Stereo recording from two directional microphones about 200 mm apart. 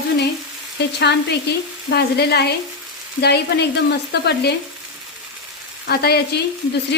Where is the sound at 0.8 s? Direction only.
60° left (ahead or behind).